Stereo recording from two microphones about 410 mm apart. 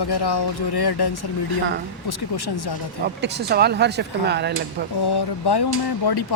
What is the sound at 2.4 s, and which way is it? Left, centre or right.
Speech, left.